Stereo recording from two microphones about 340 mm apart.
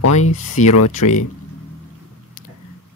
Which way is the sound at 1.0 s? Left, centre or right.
Left.